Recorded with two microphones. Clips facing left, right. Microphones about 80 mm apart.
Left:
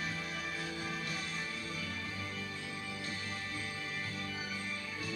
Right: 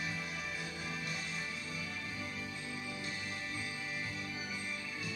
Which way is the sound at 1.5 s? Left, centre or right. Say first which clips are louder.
Left 2 dB; left.